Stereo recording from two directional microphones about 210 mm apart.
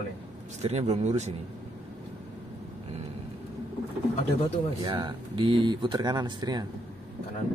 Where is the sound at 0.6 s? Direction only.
30° right (ahead or behind).